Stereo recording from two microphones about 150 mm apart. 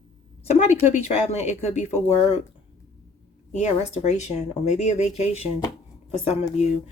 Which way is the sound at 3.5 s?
50° left (ahead or behind).